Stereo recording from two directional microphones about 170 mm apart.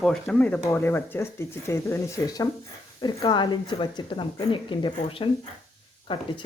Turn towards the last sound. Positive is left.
turn(degrees=30)  # may be behind; listen again after turning